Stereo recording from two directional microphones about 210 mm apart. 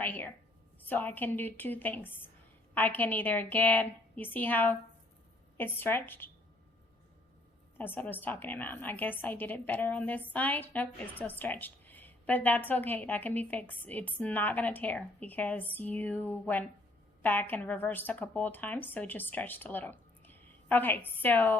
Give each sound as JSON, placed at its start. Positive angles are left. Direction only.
{"t": 0.0, "sound": "a woman's voice", "side_deg": 10}
{"t": 7.8, "sound": "a woman's voice", "side_deg": 10}